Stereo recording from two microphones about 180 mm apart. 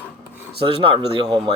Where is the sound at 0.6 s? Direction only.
30° right (ahead or behind).